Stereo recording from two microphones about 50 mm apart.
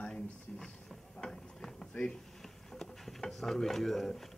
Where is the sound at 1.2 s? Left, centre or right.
Centre.